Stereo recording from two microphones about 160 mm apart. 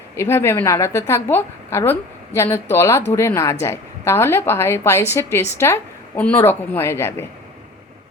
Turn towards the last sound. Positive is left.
turn(degrees=15)  # may be behind; listen again after turning